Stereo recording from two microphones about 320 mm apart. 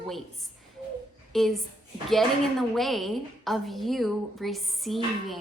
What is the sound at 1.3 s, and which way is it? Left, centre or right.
A woman's voice, centre.